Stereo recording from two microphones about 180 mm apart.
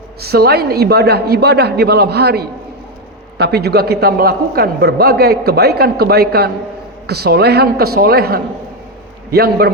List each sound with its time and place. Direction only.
0.2 s a man's voice: 60° right (ahead or behind)